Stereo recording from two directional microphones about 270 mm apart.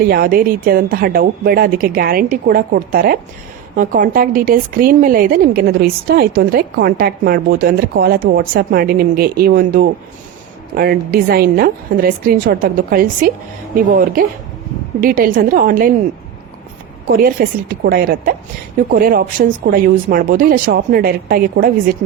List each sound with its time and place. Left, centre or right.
0.0 s a woman's voice: right
15.0 s a woman's voice: right
17.1 s a woman's voice: right